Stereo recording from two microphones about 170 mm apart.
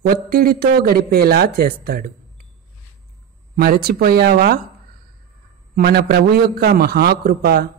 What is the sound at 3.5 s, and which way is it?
A man's voice, 65° right (ahead or behind).